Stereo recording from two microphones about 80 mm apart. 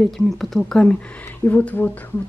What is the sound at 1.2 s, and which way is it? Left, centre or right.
Speech, left.